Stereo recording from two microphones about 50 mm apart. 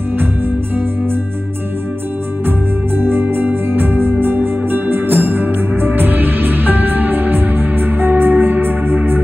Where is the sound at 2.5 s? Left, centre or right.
Right.